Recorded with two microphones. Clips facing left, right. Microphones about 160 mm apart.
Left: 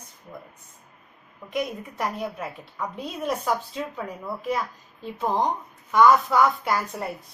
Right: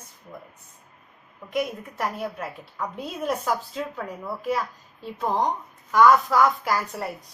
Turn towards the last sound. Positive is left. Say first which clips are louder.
# even
turn(degrees=0)  # may be behind; listen again after turning